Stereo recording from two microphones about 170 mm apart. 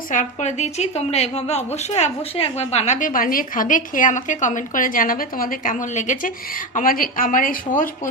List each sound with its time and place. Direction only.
0.1 s a woman's voice: 45° left (ahead or behind)